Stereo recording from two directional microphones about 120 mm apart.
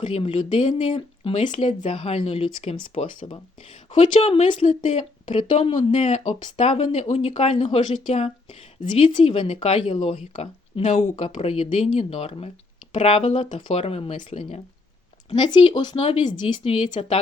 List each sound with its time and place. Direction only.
0.0 s a woman's voice: 50° left (ahead or behind)
3.2 s a woman's voice: 45° left (ahead or behind); by 5.0 s 70° left (ahead or behind)
5.3 s speech: 45° left (ahead or behind)
6.1 s speech: 65° left (ahead or behind)
6.6 s a woman's voice: 55° left (ahead or behind)
15.3 s speech: 45° left (ahead or behind)